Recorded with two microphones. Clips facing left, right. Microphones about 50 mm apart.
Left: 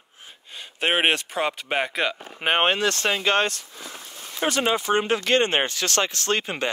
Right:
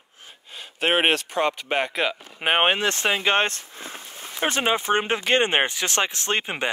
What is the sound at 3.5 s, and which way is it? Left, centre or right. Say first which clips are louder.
Speech: even; right.